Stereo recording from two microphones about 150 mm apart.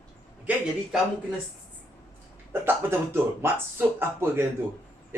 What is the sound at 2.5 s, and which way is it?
Speech, 15° right (ahead or behind).